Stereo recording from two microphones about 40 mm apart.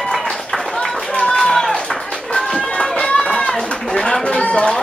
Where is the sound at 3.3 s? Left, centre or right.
Centre.